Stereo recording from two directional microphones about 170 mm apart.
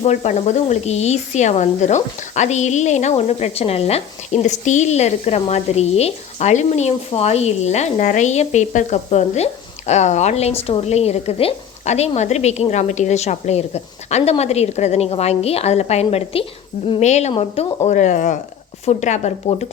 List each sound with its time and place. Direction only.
0.0 s speech: 40° left (ahead or behind)
17.8 s speech: 45° left (ahead or behind)